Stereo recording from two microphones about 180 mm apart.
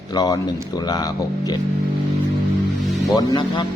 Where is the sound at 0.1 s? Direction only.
20° left (ahead or behind).